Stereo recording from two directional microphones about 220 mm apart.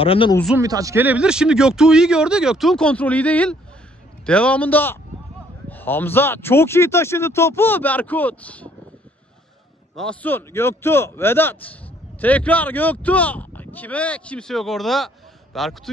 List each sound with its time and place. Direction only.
0.0 s speech: 25° left (ahead or behind)
0.6 s a man's voice: 15° right (ahead or behind); by 8.6 s 5° left (ahead or behind)
9.9 s a man's voice: 5° left (ahead or behind)